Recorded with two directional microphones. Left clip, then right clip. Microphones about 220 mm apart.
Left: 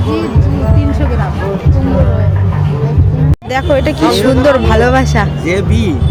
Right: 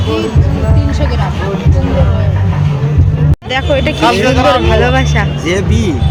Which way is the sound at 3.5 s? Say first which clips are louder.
Left 1 dB; 15° left (ahead or behind).